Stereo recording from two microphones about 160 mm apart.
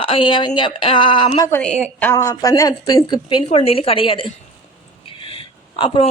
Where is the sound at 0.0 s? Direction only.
35° left (ahead or behind).